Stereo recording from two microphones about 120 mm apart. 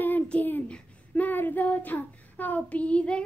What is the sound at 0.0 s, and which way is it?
Child singing, 15° left (ahead or behind).